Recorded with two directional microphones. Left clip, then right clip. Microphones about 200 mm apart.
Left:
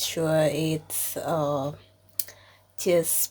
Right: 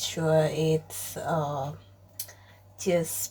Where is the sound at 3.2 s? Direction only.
55° left (ahead or behind).